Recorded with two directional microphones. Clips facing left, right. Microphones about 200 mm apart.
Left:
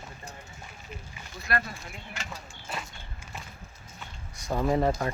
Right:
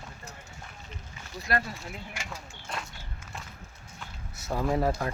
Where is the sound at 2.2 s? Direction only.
5° left (ahead or behind).